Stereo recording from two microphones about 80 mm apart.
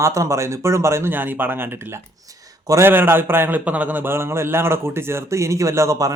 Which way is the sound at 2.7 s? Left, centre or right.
Right.